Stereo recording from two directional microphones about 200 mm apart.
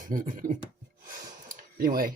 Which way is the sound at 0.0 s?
40° right (ahead or behind).